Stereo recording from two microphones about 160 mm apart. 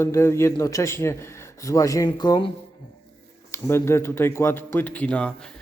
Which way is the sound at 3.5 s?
15° left (ahead or behind).